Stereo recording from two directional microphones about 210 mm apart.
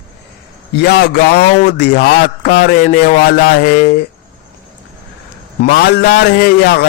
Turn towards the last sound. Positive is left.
turn(degrees=45)  # may be behind; listen again after turning